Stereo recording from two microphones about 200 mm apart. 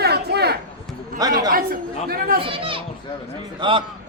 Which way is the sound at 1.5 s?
45° right (ahead or behind).